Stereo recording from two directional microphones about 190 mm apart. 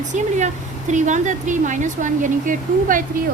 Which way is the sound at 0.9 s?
40° right (ahead or behind).